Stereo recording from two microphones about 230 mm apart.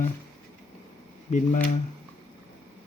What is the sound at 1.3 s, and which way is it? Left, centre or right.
Speech, left.